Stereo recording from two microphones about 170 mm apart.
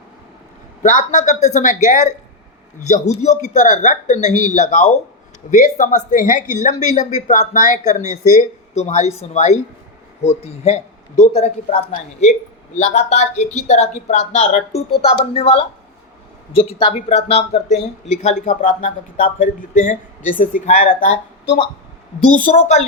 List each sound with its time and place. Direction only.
0.8 s a woman's voice: 45° left (ahead or behind)
22.4 s a woman's voice: 45° left (ahead or behind)